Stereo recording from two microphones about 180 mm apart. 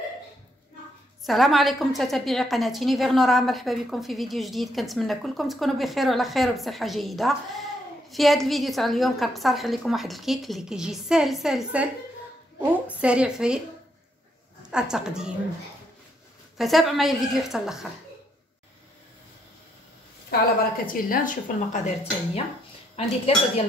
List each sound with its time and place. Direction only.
1.2 s a woman's voice: centre (ahead or behind)
14.7 s a woman's voice: 5° right (ahead or behind)
16.5 s a woman's voice: centre (ahead or behind)
20.2 s a woman's voice: 50° left (ahead or behind)